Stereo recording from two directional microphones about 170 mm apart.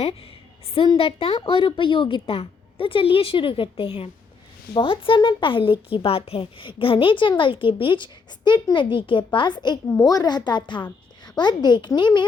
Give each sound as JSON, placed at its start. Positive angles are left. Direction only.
{"t": 0.0, "sound": "a woman's voice", "side_deg": 35}